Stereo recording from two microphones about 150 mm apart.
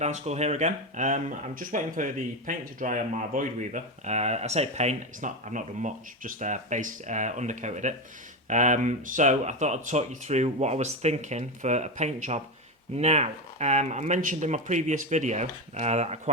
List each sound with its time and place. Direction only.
0.0 s speech: 45° right (ahead or behind)